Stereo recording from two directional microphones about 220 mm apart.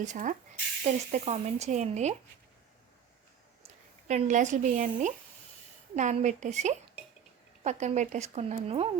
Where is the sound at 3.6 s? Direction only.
30° right (ahead or behind).